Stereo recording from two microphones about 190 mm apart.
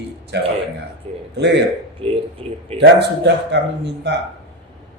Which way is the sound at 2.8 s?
65° right (ahead or behind).